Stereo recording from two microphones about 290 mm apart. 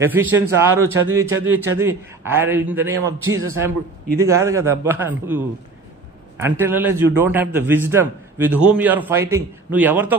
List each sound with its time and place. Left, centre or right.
0.0 s a man's voice: centre
3.3 s a man's voice: right
4.2 s a man's voice: centre
6.4 s a man's voice: centre